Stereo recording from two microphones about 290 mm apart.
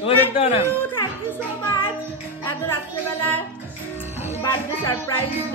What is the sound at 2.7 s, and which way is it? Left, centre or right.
Speech, centre.